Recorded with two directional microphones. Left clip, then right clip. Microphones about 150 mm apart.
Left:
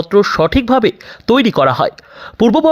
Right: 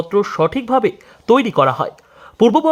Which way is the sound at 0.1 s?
15° left (ahead or behind).